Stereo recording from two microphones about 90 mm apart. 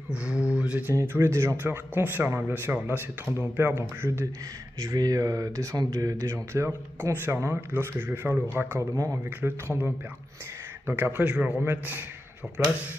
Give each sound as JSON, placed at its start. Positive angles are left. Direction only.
{"t": 0.1, "sound": "speech", "side_deg": -10}
{"t": 0.6, "sound": "mantra", "side_deg": -15}
{"t": 0.8, "sound": "a man's voice", "side_deg": -25}
{"t": 4.7, "sound": "a man's voice", "side_deg": -40}
{"t": 8.9, "sound": "speech", "side_deg": -35}
{"t": 9.4, "sound": "a man's voice", "side_deg": -25}